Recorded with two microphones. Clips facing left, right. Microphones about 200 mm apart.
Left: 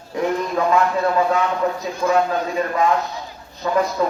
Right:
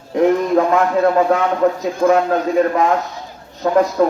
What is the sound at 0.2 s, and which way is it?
A man's voice, 50° right (ahead or behind).